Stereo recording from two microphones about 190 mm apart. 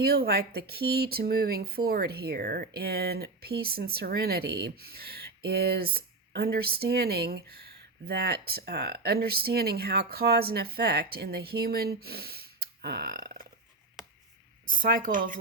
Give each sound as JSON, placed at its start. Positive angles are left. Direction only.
{"t": 0.0, "sound": "speech", "side_deg": -55}
{"t": 12.8, "sound": "a sound", "side_deg": -55}
{"t": 14.7, "sound": "speech", "side_deg": -50}